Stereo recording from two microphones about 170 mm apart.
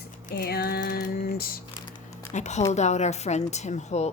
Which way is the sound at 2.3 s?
45° left (ahead or behind).